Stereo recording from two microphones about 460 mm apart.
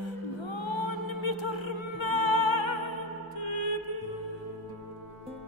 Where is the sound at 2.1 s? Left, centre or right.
Right.